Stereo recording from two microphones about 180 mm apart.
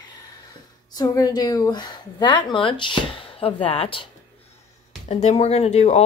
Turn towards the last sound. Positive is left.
turn(degrees=40)  # may be behind; listen again after turning